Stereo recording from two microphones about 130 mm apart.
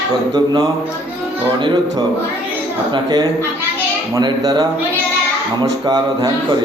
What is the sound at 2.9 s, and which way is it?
Speech, 35° right (ahead or behind).